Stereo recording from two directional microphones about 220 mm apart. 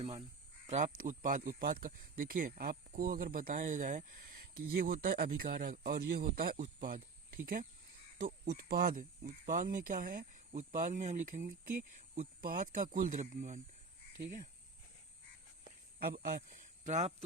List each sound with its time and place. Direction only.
0.0 s speech: 30° right (ahead or behind)
16.0 s speech: 45° right (ahead or behind)